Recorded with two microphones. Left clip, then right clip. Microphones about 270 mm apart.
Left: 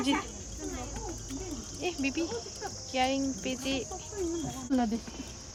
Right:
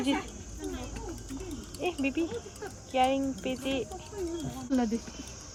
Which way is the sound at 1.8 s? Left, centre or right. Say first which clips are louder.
Right 2 dB; centre.